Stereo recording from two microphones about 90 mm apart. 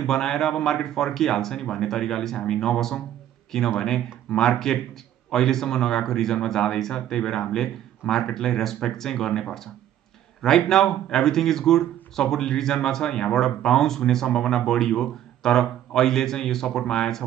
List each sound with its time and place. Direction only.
0.0 s speech: 5° left (ahead or behind)